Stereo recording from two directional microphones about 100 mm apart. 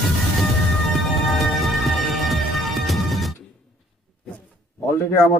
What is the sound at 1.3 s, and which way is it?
Music, centre (ahead or behind).